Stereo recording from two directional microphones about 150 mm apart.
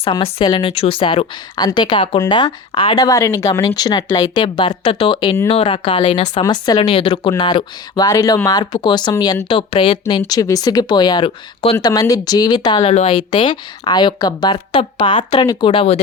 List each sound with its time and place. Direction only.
0.0 s speech: 40° left (ahead or behind)
6.4 s speech: 25° left (ahead or behind)
6.7 s speech: 40° left (ahead or behind)
11.8 s speech: 25° left (ahead or behind)
12.9 s a woman's voice: 45° left (ahead or behind)
13.1 s speech: 35° left (ahead or behind)